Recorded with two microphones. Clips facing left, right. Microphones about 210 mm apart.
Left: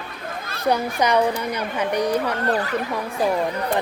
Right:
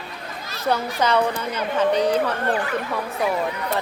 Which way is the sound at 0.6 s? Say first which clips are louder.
Left 1 dB; 15° left (ahead or behind).